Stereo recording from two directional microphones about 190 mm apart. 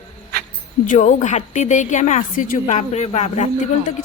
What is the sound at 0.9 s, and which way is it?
A woman's voice, 40° left (ahead or behind).